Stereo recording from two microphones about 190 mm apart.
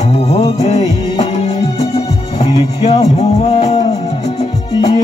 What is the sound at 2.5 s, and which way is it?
Music, 35° left (ahead or behind).